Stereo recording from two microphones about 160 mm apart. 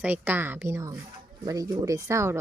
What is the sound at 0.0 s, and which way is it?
A woman's voice, 10° right (ahead or behind).